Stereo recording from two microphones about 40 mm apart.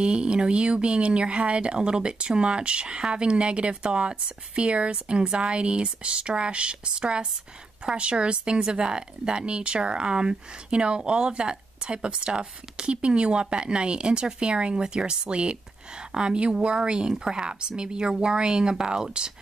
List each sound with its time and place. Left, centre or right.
0.0 s speech: right